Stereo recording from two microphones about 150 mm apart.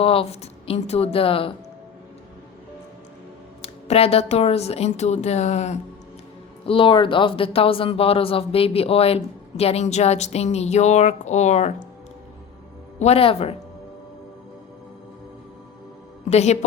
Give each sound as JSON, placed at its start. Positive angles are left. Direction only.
{"t": 0.0, "sound": "speech", "side_deg": 40}
{"t": 3.6, "sound": "speech", "side_deg": 40}
{"t": 6.7, "sound": "speech", "side_deg": 35}
{"t": 13.0, "sound": "speech", "side_deg": 40}
{"t": 16.3, "sound": "speech", "side_deg": 45}